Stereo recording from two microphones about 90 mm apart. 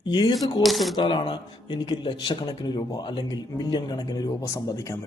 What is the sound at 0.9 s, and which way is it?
Speech, 60° left (ahead or behind).